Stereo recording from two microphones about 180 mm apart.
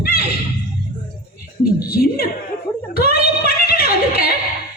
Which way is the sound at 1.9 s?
55° left (ahead or behind).